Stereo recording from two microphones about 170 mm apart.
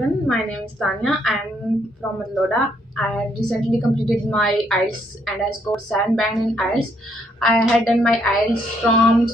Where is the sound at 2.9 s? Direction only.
5° left (ahead or behind).